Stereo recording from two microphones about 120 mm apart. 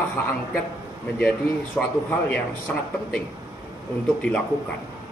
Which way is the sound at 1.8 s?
10° left (ahead or behind).